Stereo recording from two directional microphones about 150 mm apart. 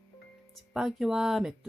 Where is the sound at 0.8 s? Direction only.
Centre (ahead or behind).